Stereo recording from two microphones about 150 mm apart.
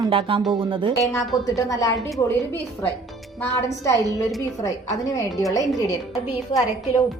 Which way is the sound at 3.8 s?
20° left (ahead or behind).